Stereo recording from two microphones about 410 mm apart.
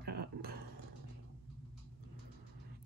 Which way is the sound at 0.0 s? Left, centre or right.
Right.